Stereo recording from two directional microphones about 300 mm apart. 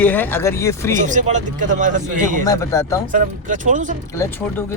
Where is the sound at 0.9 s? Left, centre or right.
Right.